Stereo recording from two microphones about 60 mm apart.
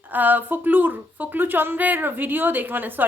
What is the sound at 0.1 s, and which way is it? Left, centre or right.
Speech, right.